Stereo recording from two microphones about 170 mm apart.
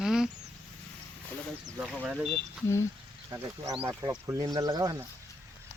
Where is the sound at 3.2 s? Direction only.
15° right (ahead or behind).